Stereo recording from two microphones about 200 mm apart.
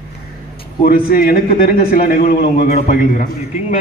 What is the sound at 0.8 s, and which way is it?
A man's voice, 45° left (ahead or behind).